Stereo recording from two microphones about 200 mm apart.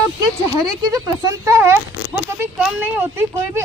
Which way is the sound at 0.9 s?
20° right (ahead or behind).